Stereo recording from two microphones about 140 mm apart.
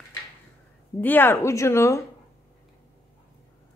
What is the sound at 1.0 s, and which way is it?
A woman's voice, 15° left (ahead or behind).